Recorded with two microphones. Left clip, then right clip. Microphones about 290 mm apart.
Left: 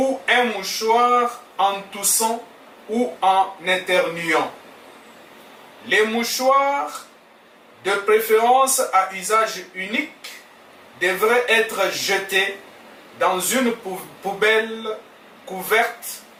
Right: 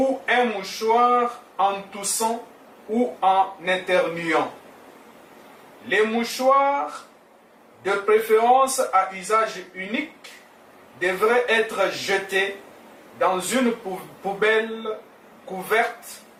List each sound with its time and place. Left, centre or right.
0.3 s speech: centre
5.9 s speech: centre
13.8 s speech: right
14.3 s speech: centre